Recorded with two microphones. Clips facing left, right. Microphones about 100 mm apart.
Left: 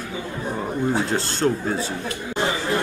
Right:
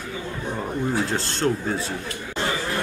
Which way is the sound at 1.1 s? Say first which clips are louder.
Left 2 dB; centre (ahead or behind).